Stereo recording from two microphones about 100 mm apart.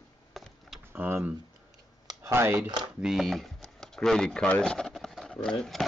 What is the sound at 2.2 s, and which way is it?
Speech, 25° right (ahead or behind).